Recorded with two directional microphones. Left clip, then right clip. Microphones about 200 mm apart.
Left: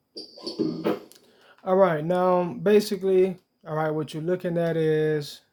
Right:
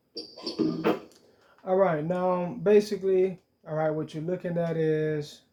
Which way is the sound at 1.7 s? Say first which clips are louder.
Left 4 dB; 45° left (ahead or behind).